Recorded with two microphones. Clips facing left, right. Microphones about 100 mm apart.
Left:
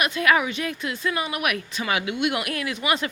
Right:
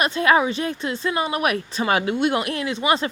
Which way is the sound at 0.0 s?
30° right (ahead or behind).